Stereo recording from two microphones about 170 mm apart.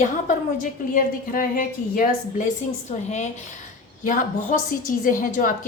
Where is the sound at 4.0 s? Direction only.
50° left (ahead or behind).